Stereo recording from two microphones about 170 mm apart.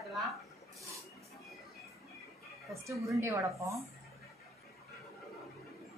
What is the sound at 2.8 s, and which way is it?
Speech, 20° right (ahead or behind).